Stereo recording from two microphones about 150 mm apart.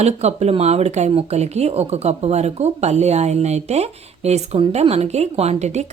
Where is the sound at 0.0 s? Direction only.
45° right (ahead or behind).